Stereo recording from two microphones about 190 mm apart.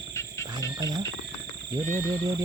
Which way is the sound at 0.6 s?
20° right (ahead or behind).